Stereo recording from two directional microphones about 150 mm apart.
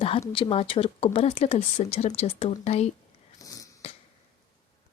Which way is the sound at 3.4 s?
20° left (ahead or behind).